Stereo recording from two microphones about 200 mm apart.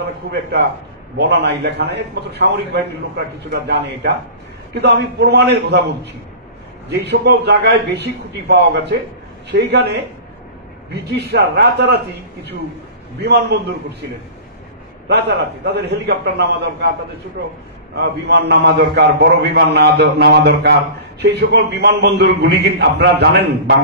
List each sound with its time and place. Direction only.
0.3 s a man's voice: 55° right (ahead or behind)
6.9 s a man's voice: 55° right (ahead or behind)
13.2 s a man's voice: 55° right (ahead or behind)
15.0 s a man's voice: 55° right (ahead or behind)
17.9 s a man's voice: 55° right (ahead or behind)